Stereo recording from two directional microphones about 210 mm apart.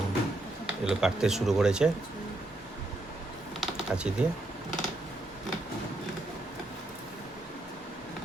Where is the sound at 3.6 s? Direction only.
5° right (ahead or behind).